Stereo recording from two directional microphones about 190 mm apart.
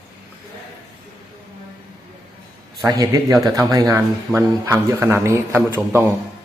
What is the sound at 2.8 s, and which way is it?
A man's voice, 15° right (ahead or behind).